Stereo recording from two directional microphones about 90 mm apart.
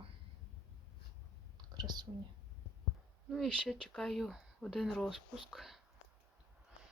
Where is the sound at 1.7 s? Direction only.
55° right (ahead or behind).